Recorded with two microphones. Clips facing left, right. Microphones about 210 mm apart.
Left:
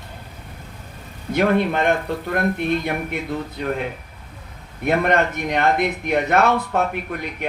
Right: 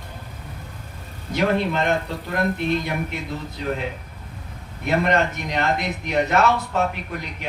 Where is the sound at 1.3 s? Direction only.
55° left (ahead or behind).